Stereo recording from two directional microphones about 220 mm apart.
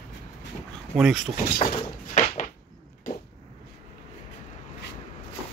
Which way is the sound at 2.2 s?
35° left (ahead or behind).